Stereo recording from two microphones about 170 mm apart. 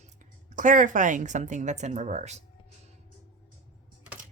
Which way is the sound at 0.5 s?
50° right (ahead or behind).